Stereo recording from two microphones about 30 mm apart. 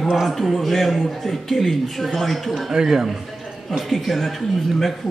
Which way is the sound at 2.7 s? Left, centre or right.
Centre.